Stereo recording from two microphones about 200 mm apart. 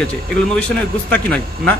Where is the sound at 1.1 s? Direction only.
5° left (ahead or behind).